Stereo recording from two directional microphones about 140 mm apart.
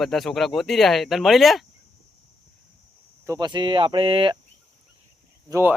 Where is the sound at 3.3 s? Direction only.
30° right (ahead or behind).